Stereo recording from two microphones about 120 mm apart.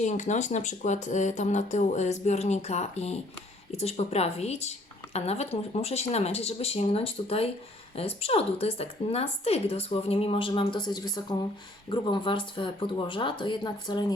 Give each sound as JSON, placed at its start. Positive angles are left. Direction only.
{"t": 0.0, "sound": "speech", "side_deg": 85}